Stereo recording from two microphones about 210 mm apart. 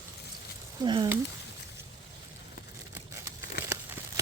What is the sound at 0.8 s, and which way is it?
Speech, 20° right (ahead or behind).